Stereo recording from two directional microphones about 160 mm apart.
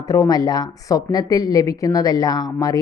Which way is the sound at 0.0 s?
20° left (ahead or behind).